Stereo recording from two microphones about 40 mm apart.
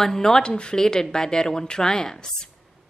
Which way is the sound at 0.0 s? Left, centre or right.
Centre.